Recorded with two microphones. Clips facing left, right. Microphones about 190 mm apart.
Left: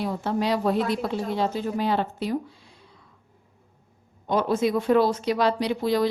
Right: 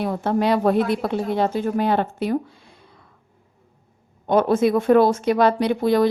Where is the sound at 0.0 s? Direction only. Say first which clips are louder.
Right 5 dB; 55° right (ahead or behind).